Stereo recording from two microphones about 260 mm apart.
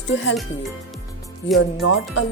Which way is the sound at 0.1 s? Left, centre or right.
Left.